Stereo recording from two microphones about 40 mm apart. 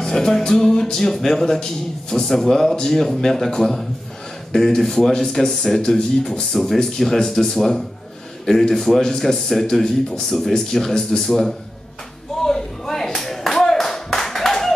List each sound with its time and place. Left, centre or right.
0.0 s music: centre
5.8 s speech: left
6.2 s music: centre
12.4 s clapping: centre